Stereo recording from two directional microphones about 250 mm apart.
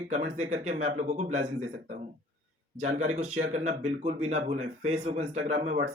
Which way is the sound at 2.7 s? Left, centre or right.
Right.